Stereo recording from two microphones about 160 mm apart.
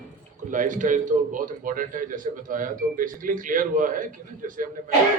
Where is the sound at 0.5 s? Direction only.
55° right (ahead or behind).